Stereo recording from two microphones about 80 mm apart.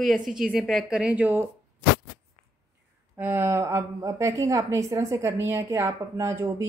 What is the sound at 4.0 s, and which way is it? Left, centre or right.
A woman's voice, right.